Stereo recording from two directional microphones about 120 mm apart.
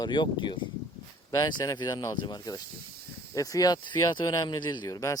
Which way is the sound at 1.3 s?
30° left (ahead or behind).